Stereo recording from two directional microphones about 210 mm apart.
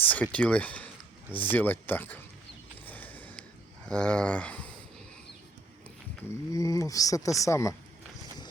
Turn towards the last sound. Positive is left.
turn(degrees=15)  # may be behind; listen again after turning